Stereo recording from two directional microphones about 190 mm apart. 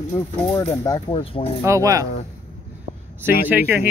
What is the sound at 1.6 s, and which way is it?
Speech, 15° right (ahead or behind).